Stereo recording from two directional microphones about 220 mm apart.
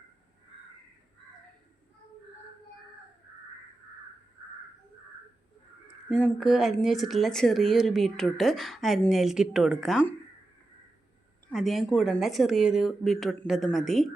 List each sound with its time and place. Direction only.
6.1 s speech: centre (ahead or behind)
11.5 s speech: centre (ahead or behind)